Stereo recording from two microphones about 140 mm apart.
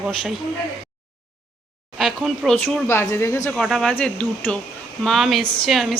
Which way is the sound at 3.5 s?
5° left (ahead or behind).